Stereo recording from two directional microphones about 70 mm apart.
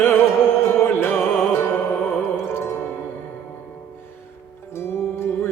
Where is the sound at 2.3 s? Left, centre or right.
Left.